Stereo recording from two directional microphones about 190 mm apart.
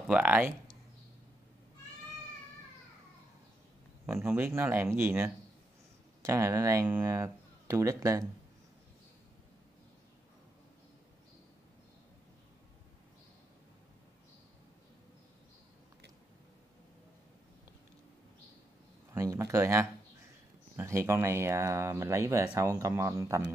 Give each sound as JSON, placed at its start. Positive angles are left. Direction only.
{"t": 0.0, "sound": "speech", "side_deg": -5}
{"t": 4.0, "sound": "speech", "side_deg": -10}
{"t": 19.1, "sound": "speech", "side_deg": -15}